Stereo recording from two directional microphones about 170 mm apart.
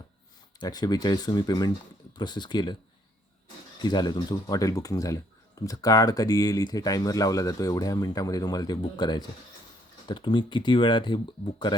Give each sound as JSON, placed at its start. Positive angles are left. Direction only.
{"t": 0.6, "sound": "speech", "side_deg": 25}
{"t": 3.8, "sound": "speech", "side_deg": 25}